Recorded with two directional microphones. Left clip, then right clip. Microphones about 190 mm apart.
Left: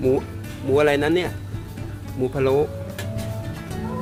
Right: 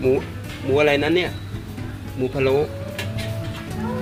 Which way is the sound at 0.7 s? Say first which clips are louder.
Right 1 dB; 10° left (ahead or behind).